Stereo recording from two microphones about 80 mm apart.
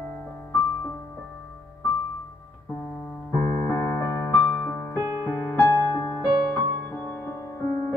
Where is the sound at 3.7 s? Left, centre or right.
Left.